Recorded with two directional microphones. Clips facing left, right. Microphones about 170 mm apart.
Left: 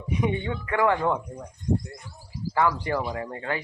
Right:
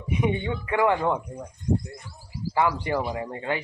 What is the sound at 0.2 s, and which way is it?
Speech, 20° right (ahead or behind).